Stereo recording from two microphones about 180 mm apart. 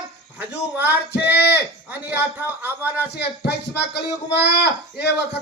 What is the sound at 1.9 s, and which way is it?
A man's voice, 10° right (ahead or behind).